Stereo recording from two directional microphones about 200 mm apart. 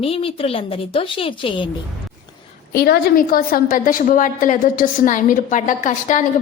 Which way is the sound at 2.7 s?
50° left (ahead or behind).